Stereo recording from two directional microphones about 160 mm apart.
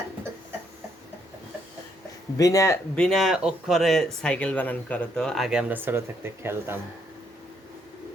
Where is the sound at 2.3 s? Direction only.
20° left (ahead or behind).